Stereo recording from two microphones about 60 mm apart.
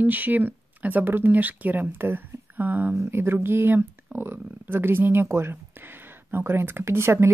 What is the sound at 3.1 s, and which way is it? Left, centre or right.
Speech, right.